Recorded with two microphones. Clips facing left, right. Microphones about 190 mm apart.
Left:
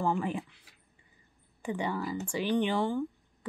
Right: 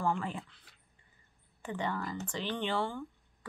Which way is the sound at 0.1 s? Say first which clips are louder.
Left 4 dB; 15° left (ahead or behind).